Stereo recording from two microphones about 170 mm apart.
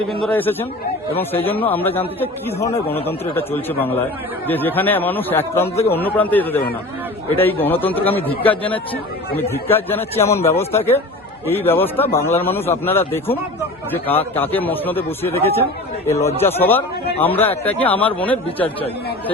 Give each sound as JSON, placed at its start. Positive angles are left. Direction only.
{"t": 0.1, "sound": "speech", "side_deg": 5}
{"t": 2.6, "sound": "a man's voice", "side_deg": 35}
{"t": 3.1, "sound": "speech", "side_deg": 10}
{"t": 13.9, "sound": "speech", "side_deg": 10}